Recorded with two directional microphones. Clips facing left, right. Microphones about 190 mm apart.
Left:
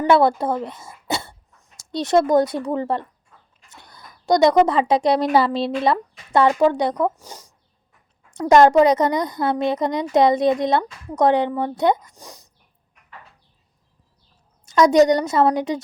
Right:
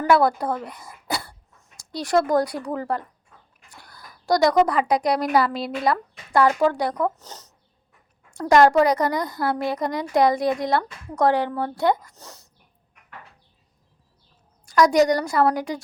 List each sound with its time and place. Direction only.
0.0 s speech: 25° left (ahead or behind)
8.4 s a woman's voice: 20° left (ahead or behind)
14.6 s a woman's voice: 20° left (ahead or behind)